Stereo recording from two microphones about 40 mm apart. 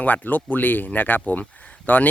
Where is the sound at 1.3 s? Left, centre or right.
Left.